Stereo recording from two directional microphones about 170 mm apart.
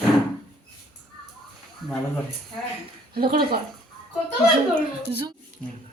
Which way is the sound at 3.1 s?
60° right (ahead or behind).